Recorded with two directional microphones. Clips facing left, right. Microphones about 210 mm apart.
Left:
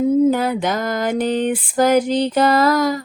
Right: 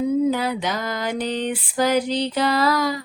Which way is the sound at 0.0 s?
45° left (ahead or behind).